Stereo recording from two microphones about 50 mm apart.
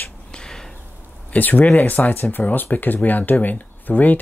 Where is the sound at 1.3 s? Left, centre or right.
Left.